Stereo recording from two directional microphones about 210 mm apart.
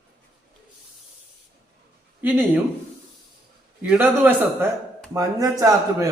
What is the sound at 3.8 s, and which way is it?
Speech, 10° right (ahead or behind).